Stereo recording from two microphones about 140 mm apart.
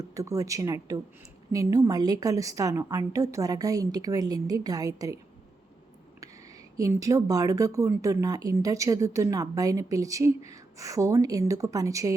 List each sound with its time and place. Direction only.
0.0 s speech: 20° right (ahead or behind)
6.7 s speech: 25° right (ahead or behind)